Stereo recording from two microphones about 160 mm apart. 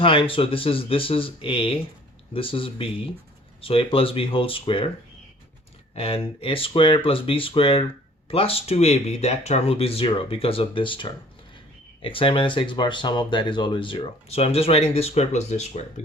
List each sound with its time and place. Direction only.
0.0 s speech: 35° left (ahead or behind)
5.9 s speech: 35° left (ahead or behind)